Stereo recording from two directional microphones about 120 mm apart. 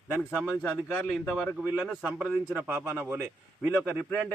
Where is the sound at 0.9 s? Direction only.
15° left (ahead or behind).